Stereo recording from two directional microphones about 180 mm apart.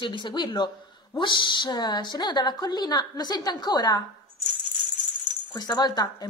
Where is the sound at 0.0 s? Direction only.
25° left (ahead or behind).